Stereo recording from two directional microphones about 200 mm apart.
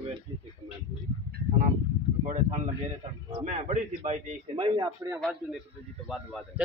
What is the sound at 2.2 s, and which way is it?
A man's voice, 40° right (ahead or behind).